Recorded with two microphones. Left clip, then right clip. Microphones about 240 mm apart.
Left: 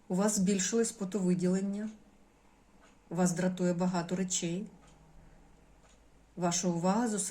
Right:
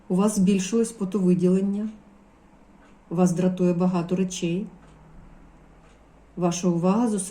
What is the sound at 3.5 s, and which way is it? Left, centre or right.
A woman's voice, centre.